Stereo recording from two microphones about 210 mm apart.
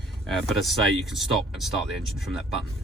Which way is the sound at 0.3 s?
Centre (ahead or behind).